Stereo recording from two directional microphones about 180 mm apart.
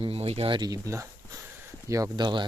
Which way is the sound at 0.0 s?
30° right (ahead or behind).